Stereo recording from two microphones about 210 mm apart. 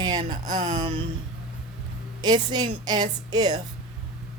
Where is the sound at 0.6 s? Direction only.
20° right (ahead or behind).